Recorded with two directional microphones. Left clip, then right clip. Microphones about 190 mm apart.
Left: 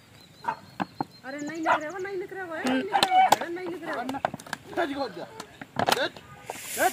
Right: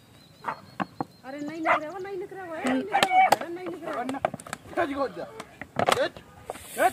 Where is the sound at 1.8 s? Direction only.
50° left (ahead or behind).